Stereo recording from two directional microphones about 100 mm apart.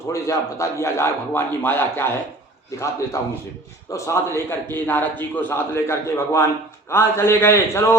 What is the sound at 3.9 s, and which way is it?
A man's voice, 30° left (ahead or behind).